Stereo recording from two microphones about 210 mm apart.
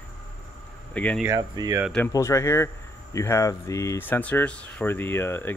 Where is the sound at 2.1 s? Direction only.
15° left (ahead or behind).